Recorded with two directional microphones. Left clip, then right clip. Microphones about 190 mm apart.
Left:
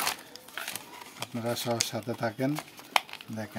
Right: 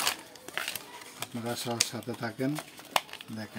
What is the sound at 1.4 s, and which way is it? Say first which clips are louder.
Speech: left 2 dB; 40° left (ahead or behind).